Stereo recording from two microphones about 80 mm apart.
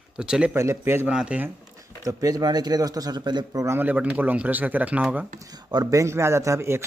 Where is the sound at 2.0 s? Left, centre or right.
Right.